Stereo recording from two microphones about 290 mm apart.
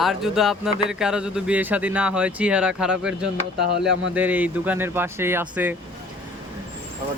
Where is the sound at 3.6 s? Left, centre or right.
Right.